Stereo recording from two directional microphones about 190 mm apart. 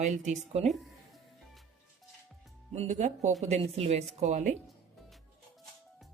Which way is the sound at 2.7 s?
35° right (ahead or behind).